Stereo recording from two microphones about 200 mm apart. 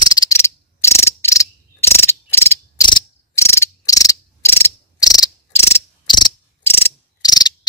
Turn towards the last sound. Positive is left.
turn(degrees=20)  # may be behind; listen again after turning